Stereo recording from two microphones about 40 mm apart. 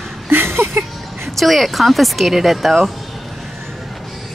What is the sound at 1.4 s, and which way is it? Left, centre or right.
Speech, centre.